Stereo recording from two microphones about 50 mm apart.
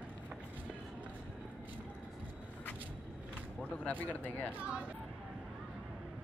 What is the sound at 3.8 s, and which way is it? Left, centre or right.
Speech, left.